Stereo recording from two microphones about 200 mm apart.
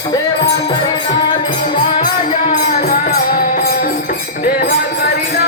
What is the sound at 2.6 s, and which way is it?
Music, 35° left (ahead or behind).